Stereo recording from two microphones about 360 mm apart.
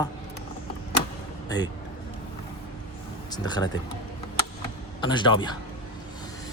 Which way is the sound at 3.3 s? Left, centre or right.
Centre.